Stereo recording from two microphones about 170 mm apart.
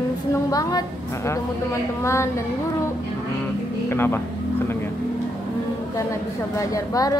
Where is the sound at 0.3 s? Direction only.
20° left (ahead or behind).